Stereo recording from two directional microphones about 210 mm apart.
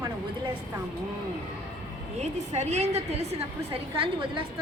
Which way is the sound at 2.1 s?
30° right (ahead or behind).